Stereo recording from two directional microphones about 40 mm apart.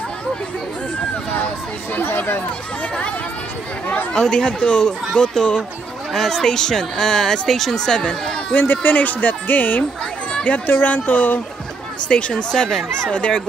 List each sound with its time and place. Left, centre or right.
2.0 s speech: left
4.1 s speech: centre
8.0 s speech: left
8.6 s speech: left
12.1 s speech: left
12.4 s speech: centre